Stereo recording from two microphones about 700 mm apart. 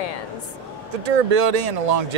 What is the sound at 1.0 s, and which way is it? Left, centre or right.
Speech, right.